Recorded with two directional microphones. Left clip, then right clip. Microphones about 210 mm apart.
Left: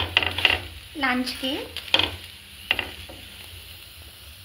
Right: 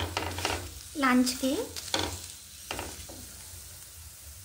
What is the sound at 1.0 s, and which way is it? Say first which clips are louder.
Speech: left 1 dB; 60° right (ahead or behind).